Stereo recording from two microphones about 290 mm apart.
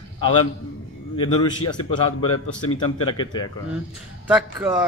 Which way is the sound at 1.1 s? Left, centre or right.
Centre.